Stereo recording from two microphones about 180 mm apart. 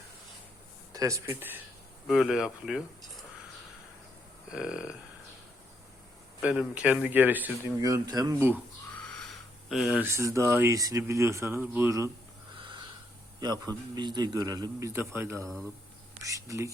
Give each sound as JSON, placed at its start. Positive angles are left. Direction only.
{"t": 0.9, "sound": "speech", "side_deg": -15}
{"t": 2.0, "sound": "speech", "side_deg": 0}
{"t": 4.5, "sound": "speech", "side_deg": -5}
{"t": 6.4, "sound": "speech", "side_deg": -5}
{"t": 9.6, "sound": "speech", "side_deg": 0}
{"t": 12.5, "sound": "snort", "side_deg": -25}
{"t": 13.4, "sound": "a man's voice", "side_deg": -25}